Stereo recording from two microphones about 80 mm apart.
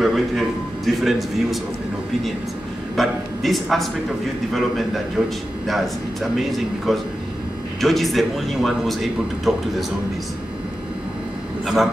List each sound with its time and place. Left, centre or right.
0.0 s speech: centre
3.0 s speech: centre
6.3 s speech: centre
11.6 s a man's voice: centre